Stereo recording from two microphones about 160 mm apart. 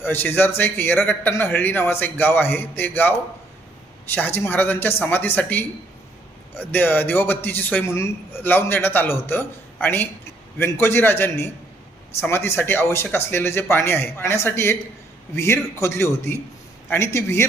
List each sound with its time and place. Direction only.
0.0 s a man's voice: 10° left (ahead or behind)